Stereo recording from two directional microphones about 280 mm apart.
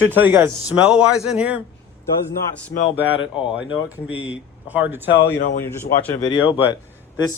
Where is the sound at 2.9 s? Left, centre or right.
Centre.